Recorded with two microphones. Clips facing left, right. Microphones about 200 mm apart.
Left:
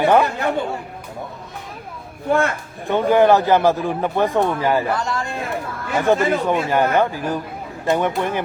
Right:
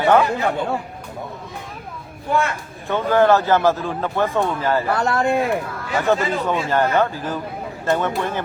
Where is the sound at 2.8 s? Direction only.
15° left (ahead or behind).